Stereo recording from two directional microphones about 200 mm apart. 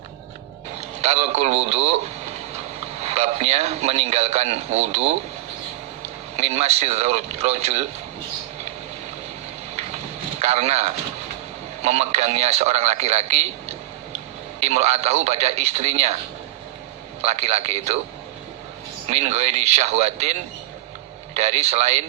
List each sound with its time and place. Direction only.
0.8 s a man's voice: 30° right (ahead or behind)
6.3 s a man's voice: 30° right (ahead or behind)
10.4 s a man's voice: 35° right (ahead or behind)
17.2 s a man's voice: 30° right (ahead or behind)
19.0 s a man's voice: 35° right (ahead or behind)